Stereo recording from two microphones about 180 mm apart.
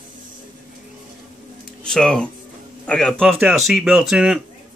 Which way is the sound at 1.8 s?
5° left (ahead or behind).